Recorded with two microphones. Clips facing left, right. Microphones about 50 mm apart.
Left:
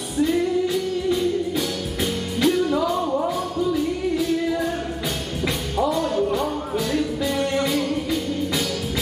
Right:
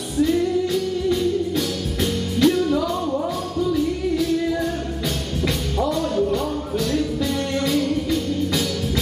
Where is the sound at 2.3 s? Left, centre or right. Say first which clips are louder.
Right 2 dB; centre.